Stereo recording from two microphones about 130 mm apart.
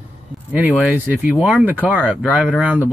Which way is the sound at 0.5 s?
5° right (ahead or behind).